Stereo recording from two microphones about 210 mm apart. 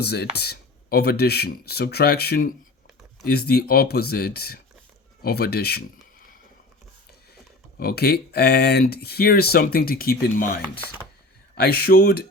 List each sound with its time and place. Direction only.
0.0 s speech: 50° left (ahead or behind)
7.8 s speech: 50° left (ahead or behind)